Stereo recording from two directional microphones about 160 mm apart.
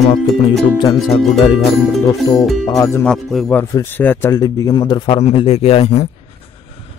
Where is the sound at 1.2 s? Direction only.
Centre (ahead or behind).